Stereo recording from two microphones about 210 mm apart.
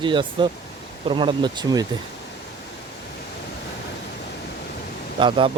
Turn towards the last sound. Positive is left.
turn(degrees=-25)  # may be behind; listen again after turning